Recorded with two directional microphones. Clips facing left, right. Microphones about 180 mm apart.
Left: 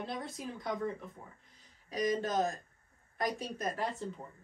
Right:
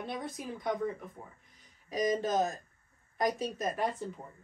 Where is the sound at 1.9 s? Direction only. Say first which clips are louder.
Right 2 dB; 20° right (ahead or behind).